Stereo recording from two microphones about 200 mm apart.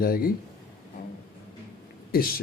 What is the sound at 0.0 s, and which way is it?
Speech, 45° left (ahead or behind).